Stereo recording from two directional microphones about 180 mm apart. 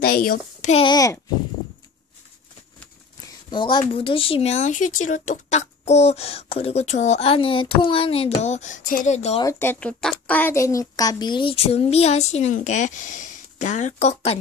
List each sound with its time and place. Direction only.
0.0 s a child's voice: 55° left (ahead or behind)
0.7 s speech: 35° left (ahead or behind)
0.9 s a child's voice: 20° left (ahead or behind)
3.4 s speech: 25° left (ahead or behind)
9.4 s speech: 15° left (ahead or behind); by 14.3 s 40° left (ahead or behind)